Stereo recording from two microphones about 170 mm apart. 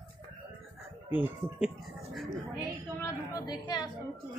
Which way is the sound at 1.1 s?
10° right (ahead or behind).